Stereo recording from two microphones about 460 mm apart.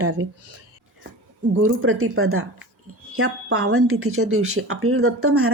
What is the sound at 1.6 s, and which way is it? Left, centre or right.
Speech, right.